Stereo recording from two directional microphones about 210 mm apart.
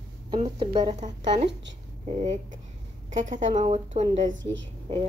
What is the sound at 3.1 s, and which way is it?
A woman's voice, 35° right (ahead or behind).